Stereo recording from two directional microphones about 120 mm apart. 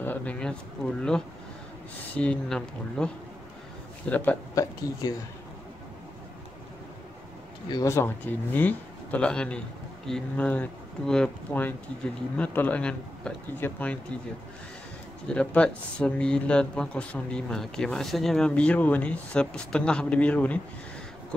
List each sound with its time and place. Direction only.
0.0 s speech: 15° left (ahead or behind)
4.1 s speech: 15° left (ahead or behind)
5.0 s speech: 30° left (ahead or behind)
7.6 s speech: 35° left (ahead or behind)
8.5 s speech: 15° left (ahead or behind)
15.2 s speech: 10° left (ahead or behind)